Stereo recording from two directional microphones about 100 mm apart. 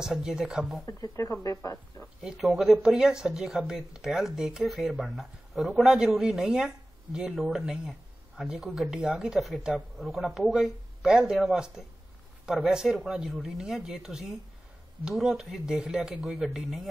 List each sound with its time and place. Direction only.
0.0 s speech: 5° right (ahead or behind)
0.8 s speech: 35° left (ahead or behind)
2.2 s speech: centre (ahead or behind)